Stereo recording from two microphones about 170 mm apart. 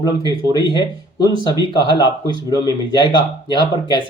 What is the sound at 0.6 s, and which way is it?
Speech, 25° left (ahead or behind).